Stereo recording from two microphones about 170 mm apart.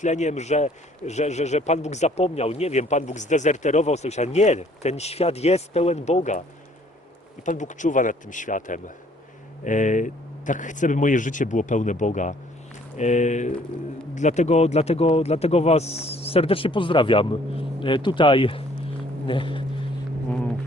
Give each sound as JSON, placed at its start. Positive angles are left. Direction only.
{"t": 0.0, "sound": "speech", "side_deg": 45}
{"t": 7.4, "sound": "speech", "side_deg": 45}